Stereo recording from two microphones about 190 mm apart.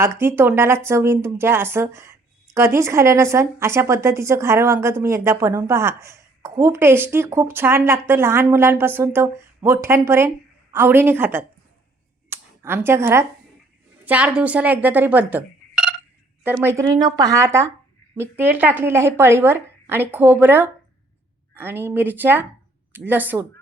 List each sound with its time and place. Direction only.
0.0 s speech: 15° right (ahead or behind)
12.3 s a sound: 10° right (ahead or behind)
14.0 s speech: 10° right (ahead or behind)